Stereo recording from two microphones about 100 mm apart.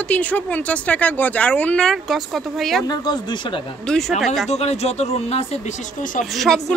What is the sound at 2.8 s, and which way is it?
Speech, 45° left (ahead or behind).